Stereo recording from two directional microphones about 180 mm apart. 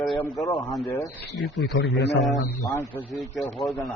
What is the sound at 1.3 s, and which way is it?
Speech, 65° left (ahead or behind).